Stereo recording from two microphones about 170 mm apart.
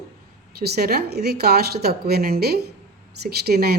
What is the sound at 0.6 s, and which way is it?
A woman's voice, 65° right (ahead or behind).